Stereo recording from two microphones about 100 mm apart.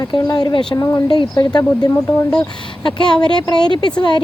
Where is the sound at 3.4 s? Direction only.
45° left (ahead or behind).